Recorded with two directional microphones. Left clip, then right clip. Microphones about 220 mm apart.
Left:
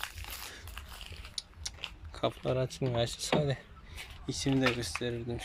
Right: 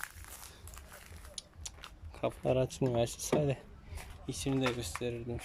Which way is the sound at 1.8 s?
5° right (ahead or behind).